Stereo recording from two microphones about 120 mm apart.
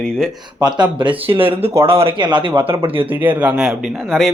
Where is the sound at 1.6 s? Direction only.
55° right (ahead or behind).